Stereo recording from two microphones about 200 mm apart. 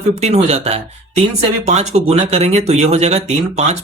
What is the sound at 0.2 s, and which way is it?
Speech, 35° right (ahead or behind).